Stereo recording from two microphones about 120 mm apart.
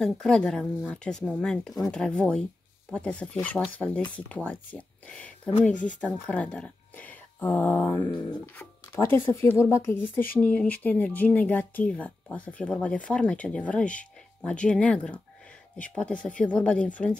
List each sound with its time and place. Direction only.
0.0 s speech: 5° left (ahead or behind)
5.5 s speech: 90° left
5.9 s speech: 10° left (ahead or behind)
8.1 s speech: 40° left (ahead or behind)
8.5 s speech: 15° left (ahead or behind)